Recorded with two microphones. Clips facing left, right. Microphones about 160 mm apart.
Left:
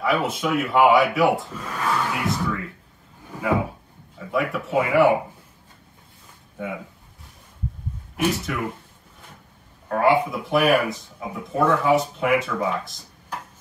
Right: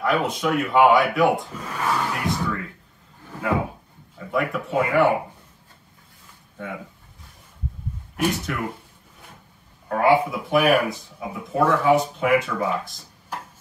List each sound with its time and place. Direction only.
0.0 s speech: centre (ahead or behind)
2.1 s music: centre (ahead or behind)
3.3 s a sound: 10° left (ahead or behind)
4.2 s speech: centre (ahead or behind)
6.6 s speech: 10° left (ahead or behind)
8.2 s speech: centre (ahead or behind)
9.8 s speech: centre (ahead or behind)